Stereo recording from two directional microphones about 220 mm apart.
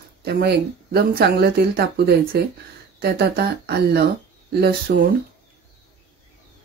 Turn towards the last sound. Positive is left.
turn(degrees=-45)  # may be behind; listen again after turning